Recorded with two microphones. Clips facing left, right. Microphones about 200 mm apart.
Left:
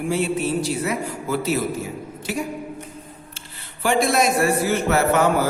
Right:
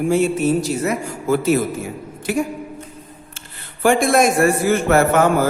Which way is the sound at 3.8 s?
50° right (ahead or behind).